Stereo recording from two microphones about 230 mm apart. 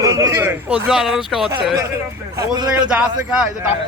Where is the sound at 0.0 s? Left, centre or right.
Centre.